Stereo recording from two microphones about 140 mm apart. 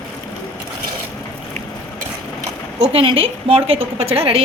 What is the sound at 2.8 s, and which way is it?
A woman's voice, 40° right (ahead or behind).